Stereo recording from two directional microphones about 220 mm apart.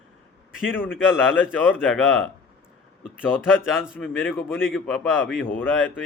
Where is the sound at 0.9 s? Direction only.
5° right (ahead or behind).